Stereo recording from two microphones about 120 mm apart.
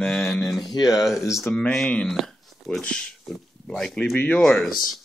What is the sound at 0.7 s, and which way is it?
Speech, 30° left (ahead or behind).